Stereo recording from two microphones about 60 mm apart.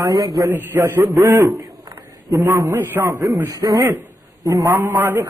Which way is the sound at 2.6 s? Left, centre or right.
Right.